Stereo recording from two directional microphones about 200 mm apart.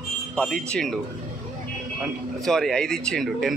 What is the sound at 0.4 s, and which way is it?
Speech, 5° left (ahead or behind).